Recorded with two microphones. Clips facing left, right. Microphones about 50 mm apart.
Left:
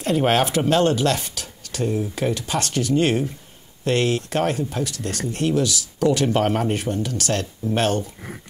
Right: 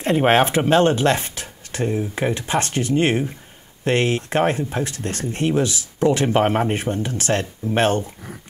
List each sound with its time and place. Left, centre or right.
0.0 s speech: right